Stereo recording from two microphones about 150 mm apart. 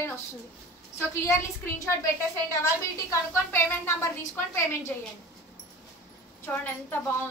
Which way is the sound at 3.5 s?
15° left (ahead or behind).